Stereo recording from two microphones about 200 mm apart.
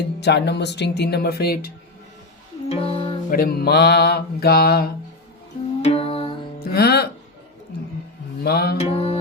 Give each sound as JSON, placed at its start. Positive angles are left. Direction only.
{"t": 0.0, "sound": "speech", "side_deg": 60}
{"t": 2.6, "sound": "music", "side_deg": 30}
{"t": 3.2, "sound": "music", "side_deg": 50}
{"t": 5.8, "sound": "music", "side_deg": 30}
{"t": 6.6, "sound": "music", "side_deg": 50}
{"t": 8.4, "sound": "music", "side_deg": 50}
{"t": 8.8, "sound": "mantra", "side_deg": 30}